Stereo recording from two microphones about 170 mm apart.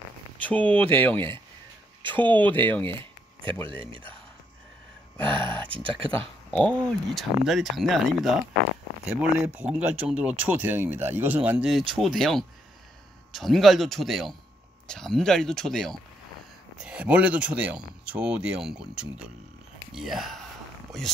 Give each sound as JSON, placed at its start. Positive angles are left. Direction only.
{"t": 0.4, "sound": "speech", "side_deg": 10}
{"t": 2.2, "sound": "speech", "side_deg": 10}
{"t": 2.9, "sound": "a sound", "side_deg": -30}
{"t": 3.6, "sound": "speech", "side_deg": -30}
{"t": 5.2, "sound": "speech", "side_deg": -30}
{"t": 6.5, "sound": "speech", "side_deg": 0}